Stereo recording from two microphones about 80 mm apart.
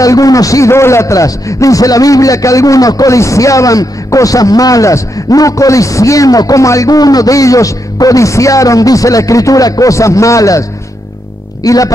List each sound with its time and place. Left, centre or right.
0.0 s a man's voice: left
11.6 s speech: left